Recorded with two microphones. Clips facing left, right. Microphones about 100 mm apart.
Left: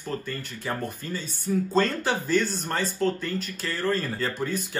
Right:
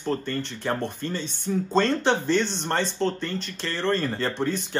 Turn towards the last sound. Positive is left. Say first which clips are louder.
# right 2 dB
turn(degrees=0)  # may be behind; listen again after turning